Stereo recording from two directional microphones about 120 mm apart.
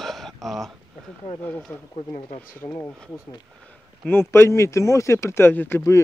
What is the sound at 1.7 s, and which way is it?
Speech, 15° left (ahead or behind).